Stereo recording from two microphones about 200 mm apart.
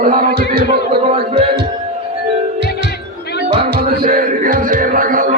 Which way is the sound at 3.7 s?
45° right (ahead or behind).